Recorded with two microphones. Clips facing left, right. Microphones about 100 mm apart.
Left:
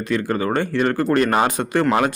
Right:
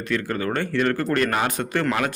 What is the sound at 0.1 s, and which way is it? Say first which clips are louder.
A man's voice: left 4 dB; 20° left (ahead or behind).